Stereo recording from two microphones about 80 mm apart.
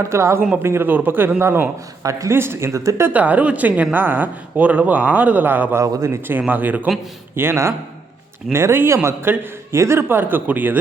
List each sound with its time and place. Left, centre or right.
0.0 s a man's voice: right
2.0 s speech: right
2.3 s speech: right
3.1 s a man's voice: centre
5.7 s a man's voice: right
7.3 s a man's voice: right